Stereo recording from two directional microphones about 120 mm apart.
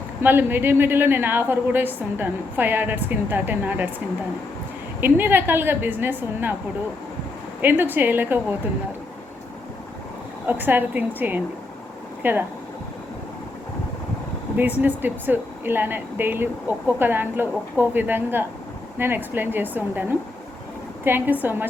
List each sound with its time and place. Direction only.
0.2 s speech: 20° right (ahead or behind)
4.9 s speech: 15° right (ahead or behind)
7.6 s speech: 15° right (ahead or behind)
10.4 s speech: 15° right (ahead or behind)
14.5 s speech: 15° right (ahead or behind)